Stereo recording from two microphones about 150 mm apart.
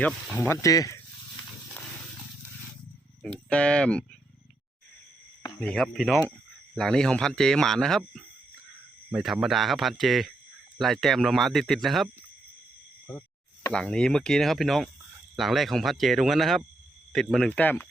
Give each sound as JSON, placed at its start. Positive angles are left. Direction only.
{"t": 0.0, "sound": "speech", "side_deg": 15}
{"t": 3.2, "sound": "speech", "side_deg": 5}
{"t": 5.5, "sound": "speech", "side_deg": 5}
{"t": 13.1, "sound": "a sound", "side_deg": 15}
{"t": 13.7, "sound": "speech", "side_deg": 5}